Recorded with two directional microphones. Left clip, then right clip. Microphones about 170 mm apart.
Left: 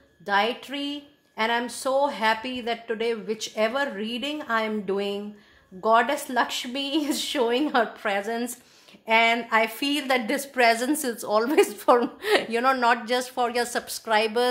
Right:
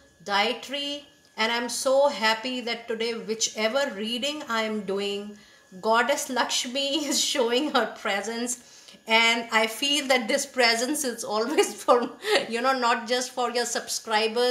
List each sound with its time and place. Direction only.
0.3 s a woman's voice: 50° left (ahead or behind)